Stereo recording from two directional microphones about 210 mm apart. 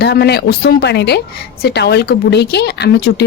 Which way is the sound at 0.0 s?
50° left (ahead or behind).